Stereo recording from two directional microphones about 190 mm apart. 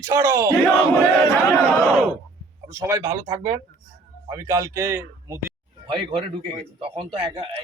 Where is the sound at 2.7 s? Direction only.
15° right (ahead or behind).